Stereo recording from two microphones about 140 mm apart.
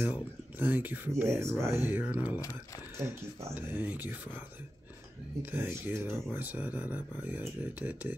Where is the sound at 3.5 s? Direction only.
15° right (ahead or behind).